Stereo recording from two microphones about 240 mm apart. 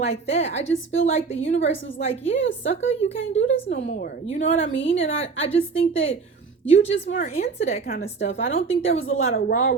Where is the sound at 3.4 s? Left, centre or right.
Left.